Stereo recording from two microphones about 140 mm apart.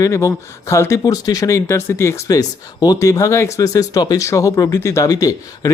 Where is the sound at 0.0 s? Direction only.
20° left (ahead or behind).